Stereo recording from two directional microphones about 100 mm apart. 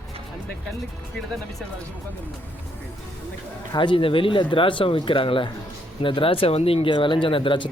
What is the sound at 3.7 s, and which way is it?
Speech, 60° left (ahead or behind).